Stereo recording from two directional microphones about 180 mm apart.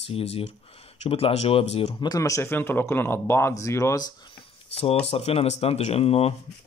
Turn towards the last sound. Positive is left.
turn(degrees=35)  # may be behind; listen again after turning